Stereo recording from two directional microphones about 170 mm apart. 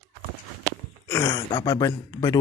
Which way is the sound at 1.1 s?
20° left (ahead or behind).